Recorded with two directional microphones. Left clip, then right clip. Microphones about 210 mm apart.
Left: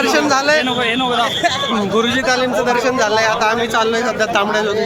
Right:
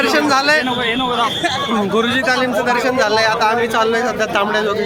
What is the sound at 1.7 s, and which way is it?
A man's voice, 5° right (ahead or behind).